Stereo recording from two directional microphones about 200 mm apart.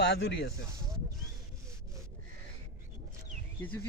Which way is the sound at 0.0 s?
60° left (ahead or behind).